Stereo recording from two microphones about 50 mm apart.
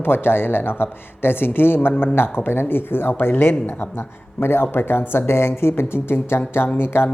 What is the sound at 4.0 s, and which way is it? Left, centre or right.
Speech, left.